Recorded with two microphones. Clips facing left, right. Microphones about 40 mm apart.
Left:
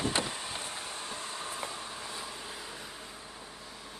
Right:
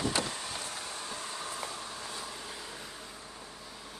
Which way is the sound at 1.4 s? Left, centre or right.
Left.